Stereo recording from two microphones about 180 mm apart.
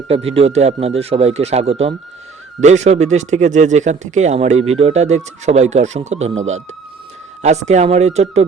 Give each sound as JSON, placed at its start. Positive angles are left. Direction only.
{"t": 0.1, "sound": "speech", "side_deg": -35}